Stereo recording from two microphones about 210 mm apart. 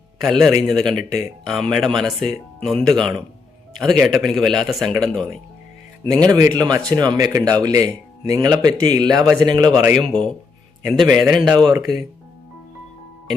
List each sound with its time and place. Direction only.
0.2 s speech: centre (ahead or behind)
6.1 s speech: 15° right (ahead or behind)
10.0 s speech: centre (ahead or behind)